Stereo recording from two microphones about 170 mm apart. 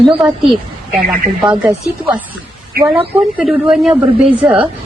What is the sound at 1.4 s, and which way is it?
Speech, 5° right (ahead or behind).